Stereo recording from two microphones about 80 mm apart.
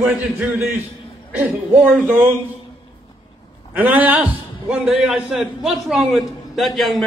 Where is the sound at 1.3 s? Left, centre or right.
Right.